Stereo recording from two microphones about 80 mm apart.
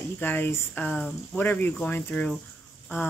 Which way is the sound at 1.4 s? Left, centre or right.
Left.